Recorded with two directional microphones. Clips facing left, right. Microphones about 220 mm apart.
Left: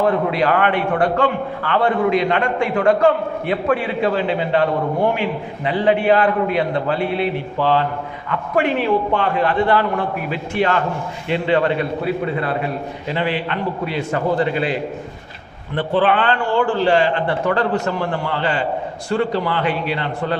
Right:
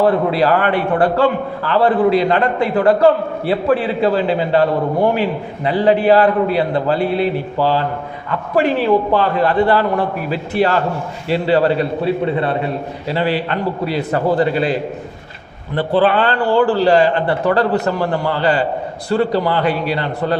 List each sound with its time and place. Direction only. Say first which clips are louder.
0.0 s a man's voice: right 3 dB; 35° right (ahead or behind)